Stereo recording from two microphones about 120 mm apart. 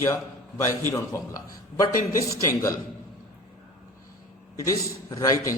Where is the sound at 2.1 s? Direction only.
25° left (ahead or behind).